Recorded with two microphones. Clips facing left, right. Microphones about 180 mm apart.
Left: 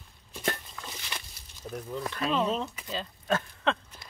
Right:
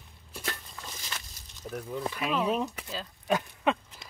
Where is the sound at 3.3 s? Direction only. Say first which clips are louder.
Right 1 dB; 15° right (ahead or behind).